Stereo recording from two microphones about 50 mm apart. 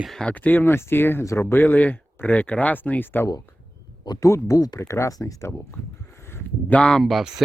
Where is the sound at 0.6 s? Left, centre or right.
Left.